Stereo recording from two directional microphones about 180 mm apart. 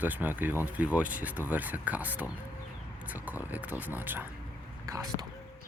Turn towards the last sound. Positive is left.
turn(degrees=-20)  # may be behind; listen again after turning